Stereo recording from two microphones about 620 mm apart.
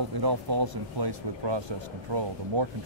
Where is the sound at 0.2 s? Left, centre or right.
Right.